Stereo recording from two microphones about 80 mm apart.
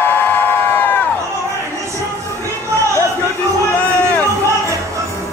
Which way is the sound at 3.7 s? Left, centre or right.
Left.